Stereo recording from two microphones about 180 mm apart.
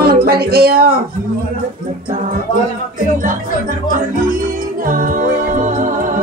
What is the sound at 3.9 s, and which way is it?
Music, 50° right (ahead or behind).